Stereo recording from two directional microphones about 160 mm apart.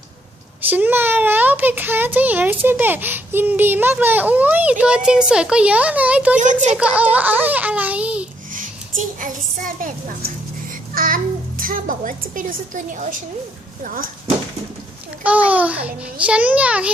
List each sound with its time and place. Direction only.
0.7 s speech: 10° right (ahead or behind)
6.4 s a woman's voice: 50° right (ahead or behind)
6.7 s speech: 10° right (ahead or behind)
8.5 s a sound: 55° right (ahead or behind)
10.9 s a child's voice: 60° right (ahead or behind)
15.2 s speech: 10° right (ahead or behind)